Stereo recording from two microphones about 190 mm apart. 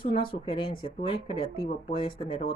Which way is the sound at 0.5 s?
25° left (ahead or behind).